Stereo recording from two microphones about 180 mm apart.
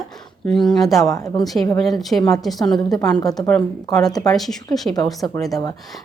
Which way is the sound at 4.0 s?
20° left (ahead or behind).